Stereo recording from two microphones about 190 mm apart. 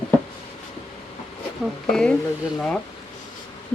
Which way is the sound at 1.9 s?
5° left (ahead or behind).